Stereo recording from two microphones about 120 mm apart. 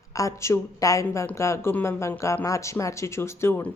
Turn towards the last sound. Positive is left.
turn(degrees=20)  # may be behind; listen again after turning